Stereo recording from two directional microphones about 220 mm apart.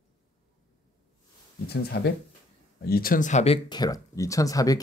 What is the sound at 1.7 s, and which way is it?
Speech, 45° left (ahead or behind).